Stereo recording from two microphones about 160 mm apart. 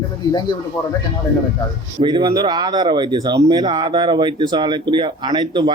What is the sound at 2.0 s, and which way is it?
Speech, 30° right (ahead or behind).